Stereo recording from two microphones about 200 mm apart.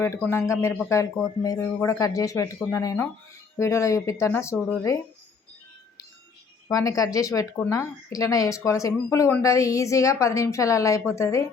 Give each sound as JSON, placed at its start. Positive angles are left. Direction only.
{"t": 0.3, "sound": "a woman's voice", "side_deg": 15}
{"t": 6.7, "sound": "a woman's voice", "side_deg": 15}